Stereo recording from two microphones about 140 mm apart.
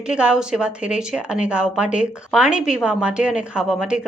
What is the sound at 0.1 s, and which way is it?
A woman's voice, 5° right (ahead or behind).